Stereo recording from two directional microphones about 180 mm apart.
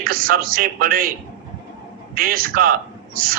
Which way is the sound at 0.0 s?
55° right (ahead or behind).